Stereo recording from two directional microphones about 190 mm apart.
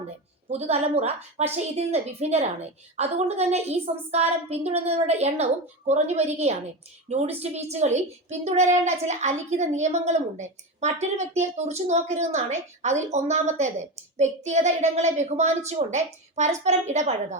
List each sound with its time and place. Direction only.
0.4 s a woman's voice: 35° right (ahead or behind)